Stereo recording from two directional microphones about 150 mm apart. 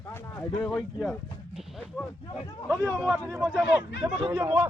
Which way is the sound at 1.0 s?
Centre (ahead or behind).